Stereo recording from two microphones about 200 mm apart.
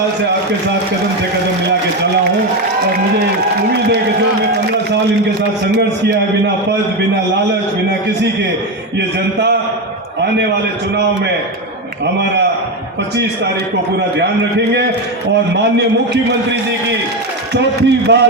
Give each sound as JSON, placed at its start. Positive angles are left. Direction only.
{"t": 9.0, "sound": "a man's voice", "side_deg": -60}
{"t": 17.5, "sound": "a man's voice", "side_deg": -55}